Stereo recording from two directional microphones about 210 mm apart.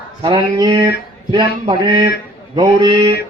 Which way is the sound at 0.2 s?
20° right (ahead or behind).